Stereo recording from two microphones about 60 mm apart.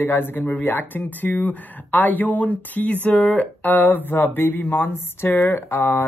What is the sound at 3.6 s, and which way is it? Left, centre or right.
Speech, left.